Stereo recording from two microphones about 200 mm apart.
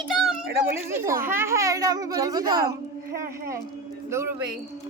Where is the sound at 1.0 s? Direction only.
15° right (ahead or behind).